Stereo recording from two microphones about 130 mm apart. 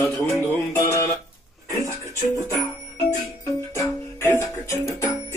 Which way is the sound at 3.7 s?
20° left (ahead or behind).